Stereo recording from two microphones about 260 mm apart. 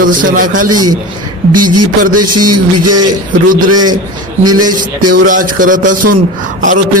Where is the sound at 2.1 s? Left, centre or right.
Right.